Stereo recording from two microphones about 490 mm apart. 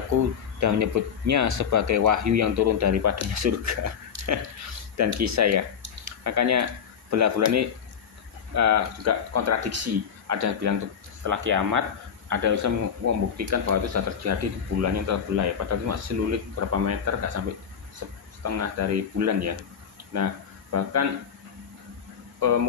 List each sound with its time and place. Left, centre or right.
0.1 s speech: right